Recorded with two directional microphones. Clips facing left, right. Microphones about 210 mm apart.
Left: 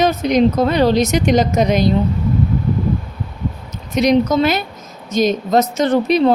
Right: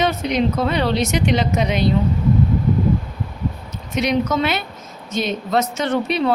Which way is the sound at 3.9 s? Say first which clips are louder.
Left 5 dB; 35° left (ahead or behind).